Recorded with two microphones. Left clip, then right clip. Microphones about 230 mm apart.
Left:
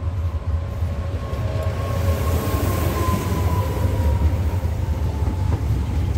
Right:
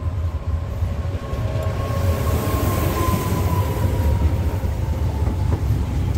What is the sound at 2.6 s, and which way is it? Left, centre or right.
Vehicle, right.